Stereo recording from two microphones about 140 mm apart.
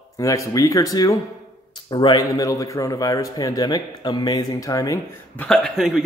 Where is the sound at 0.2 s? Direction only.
25° left (ahead or behind).